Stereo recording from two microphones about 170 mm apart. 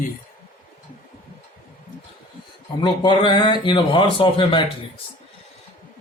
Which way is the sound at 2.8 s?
25° left (ahead or behind).